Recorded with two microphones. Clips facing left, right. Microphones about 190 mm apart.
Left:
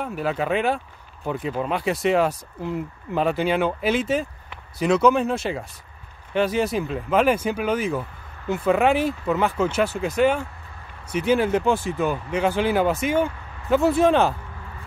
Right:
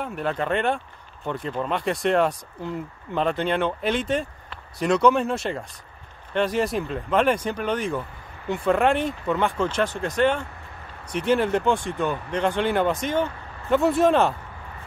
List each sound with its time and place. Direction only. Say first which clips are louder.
0.0 s speech: left 2 dB; 5° left (ahead or behind)